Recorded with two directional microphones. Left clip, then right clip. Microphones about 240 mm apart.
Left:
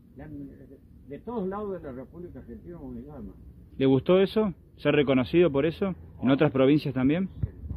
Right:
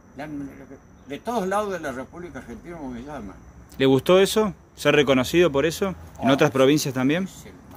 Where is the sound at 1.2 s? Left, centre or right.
Right.